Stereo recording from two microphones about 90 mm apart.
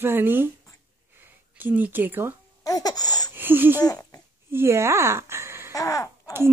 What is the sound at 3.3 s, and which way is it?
Speech, 20° right (ahead or behind).